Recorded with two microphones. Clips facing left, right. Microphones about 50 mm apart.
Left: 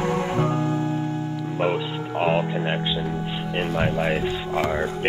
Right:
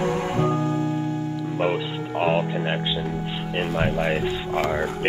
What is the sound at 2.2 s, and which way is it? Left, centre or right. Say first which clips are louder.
Music: even; centre.